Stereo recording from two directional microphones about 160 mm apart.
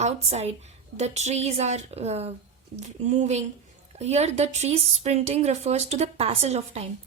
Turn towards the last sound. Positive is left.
turn(degrees=-45)  # may be behind; listen again after turning